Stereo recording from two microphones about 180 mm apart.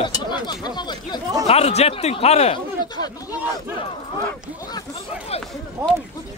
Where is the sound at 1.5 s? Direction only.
35° left (ahead or behind).